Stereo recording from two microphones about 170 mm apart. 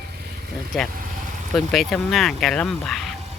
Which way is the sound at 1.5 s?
Centre (ahead or behind).